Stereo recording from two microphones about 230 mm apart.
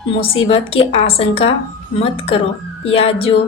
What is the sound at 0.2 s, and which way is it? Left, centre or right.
A woman's voice, left.